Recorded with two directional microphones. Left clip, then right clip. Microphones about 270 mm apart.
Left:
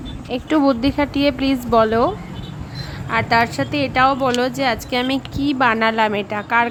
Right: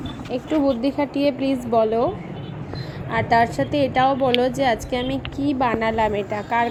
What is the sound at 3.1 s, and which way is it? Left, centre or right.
A woman's voice, centre.